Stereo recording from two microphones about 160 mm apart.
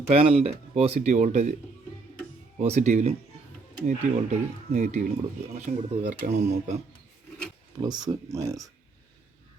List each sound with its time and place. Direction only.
0.1 s speech: 35° right (ahead or behind)
2.6 s speech: 45° right (ahead or behind)
7.8 s speech: 25° right (ahead or behind)